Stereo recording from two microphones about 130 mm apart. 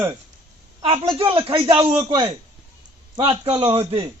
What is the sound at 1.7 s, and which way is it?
A man's voice, 30° right (ahead or behind).